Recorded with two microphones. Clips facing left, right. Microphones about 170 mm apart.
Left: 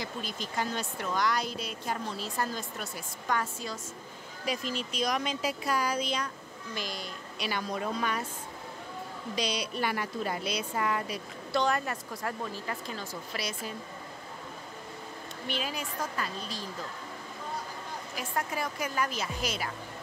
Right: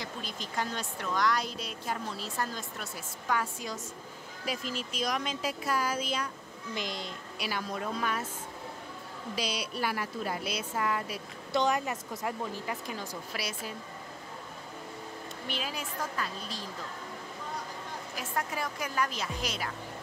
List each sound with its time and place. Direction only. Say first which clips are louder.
0.0 s speech: left 2 dB; centre (ahead or behind)
4.5 s speech: left 2 dB; 5° right (ahead or behind)
6.7 s a woman's voice: right 1 dB; 20° right (ahead or behind)
7.3 s speech: left 2 dB; 5° right (ahead or behind)
9.3 s speech: left 2 dB; 5° right (ahead or behind)
11.5 s speech: even; 20° right (ahead or behind)
15.4 s speech: left 3 dB; centre (ahead or behind)
18.1 s speech: left 1 dB; centre (ahead or behind)